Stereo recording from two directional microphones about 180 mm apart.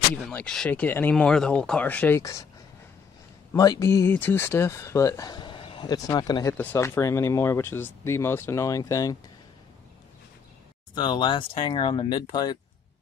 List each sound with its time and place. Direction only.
0.1 s speech: 10° left (ahead or behind)
3.5 s speech: 20° left (ahead or behind)
6.5 s speech: 10° left (ahead or behind)
11.0 s speech: 25° left (ahead or behind)